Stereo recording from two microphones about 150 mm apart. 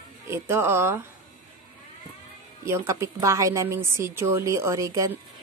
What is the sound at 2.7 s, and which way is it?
A woman's voice, 20° right (ahead or behind).